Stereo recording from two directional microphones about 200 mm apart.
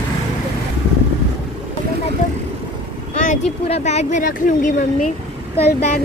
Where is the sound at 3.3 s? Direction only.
30° left (ahead or behind).